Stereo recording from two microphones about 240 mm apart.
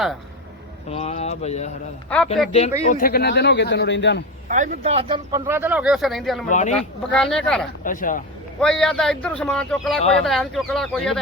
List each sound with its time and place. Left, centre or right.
0.9 s speech: left
2.0 s speech: centre
2.5 s speech: left
4.4 s speech: right; by 6.4 s centre
6.5 s speech: left
6.7 s speech: centre
7.9 s speech: left
8.6 s speech: centre